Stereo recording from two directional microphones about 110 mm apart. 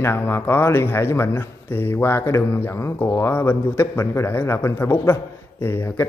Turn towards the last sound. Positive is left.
turn(degrees=20)  # may be behind; listen again after turning